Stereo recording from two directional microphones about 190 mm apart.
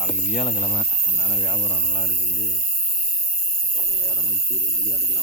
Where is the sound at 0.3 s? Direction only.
35° left (ahead or behind).